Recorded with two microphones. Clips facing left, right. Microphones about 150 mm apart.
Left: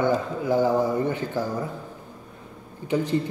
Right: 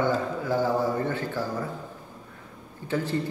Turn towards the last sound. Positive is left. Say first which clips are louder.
# left 4 dB
turn(degrees=15)  # may be behind; listen again after turning